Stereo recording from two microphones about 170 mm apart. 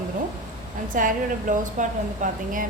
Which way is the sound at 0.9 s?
50° right (ahead or behind).